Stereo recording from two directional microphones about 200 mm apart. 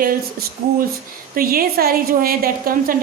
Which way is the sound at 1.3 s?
45° right (ahead or behind).